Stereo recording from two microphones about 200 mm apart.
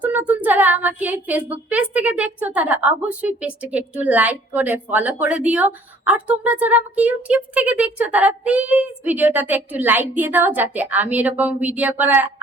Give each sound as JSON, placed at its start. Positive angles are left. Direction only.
{"t": 0.0, "sound": "a woman's voice", "side_deg": -10}